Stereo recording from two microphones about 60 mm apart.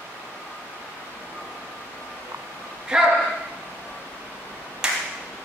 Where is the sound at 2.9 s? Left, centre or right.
Centre.